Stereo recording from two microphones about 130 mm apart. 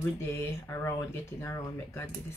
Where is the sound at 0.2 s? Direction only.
20° left (ahead or behind).